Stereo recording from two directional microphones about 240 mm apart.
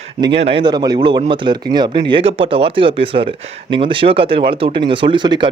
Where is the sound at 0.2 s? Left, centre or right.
Right.